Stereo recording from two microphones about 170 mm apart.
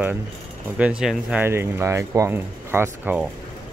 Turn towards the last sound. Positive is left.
turn(degrees=-10)  # may be behind; listen again after turning